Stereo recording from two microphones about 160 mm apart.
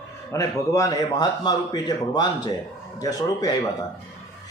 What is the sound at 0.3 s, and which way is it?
A man's voice, 20° left (ahead or behind).